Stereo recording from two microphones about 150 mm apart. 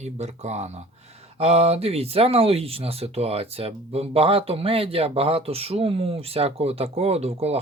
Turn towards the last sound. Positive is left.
turn(degrees=-45)  # may be behind; listen again after turning